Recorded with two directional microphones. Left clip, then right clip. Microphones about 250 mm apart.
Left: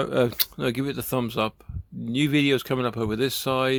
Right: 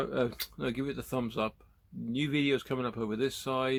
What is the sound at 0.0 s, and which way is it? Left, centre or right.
Speech, left.